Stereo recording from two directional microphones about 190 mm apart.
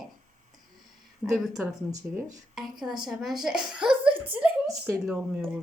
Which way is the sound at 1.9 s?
20° right (ahead or behind).